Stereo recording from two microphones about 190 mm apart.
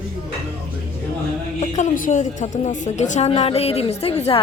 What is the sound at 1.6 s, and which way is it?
A woman's voice, 40° left (ahead or behind).